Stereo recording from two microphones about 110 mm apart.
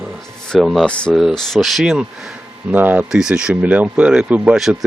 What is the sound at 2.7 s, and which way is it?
Speech, 15° right (ahead or behind).